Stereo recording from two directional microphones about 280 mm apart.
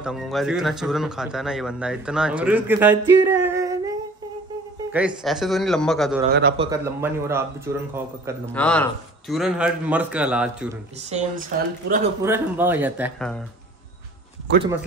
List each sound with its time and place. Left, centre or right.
0.0 s speech: centre
3.1 s music: centre
4.9 s speech: centre
6.6 s speech: centre
8.5 s speech: centre
11.1 s speech: right
12.2 s speech: centre
14.5 s speech: right